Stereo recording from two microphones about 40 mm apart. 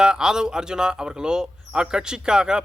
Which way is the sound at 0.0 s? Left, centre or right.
Centre.